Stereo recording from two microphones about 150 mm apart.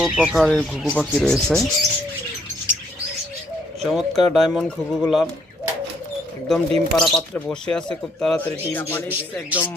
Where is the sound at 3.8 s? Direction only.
Centre (ahead or behind).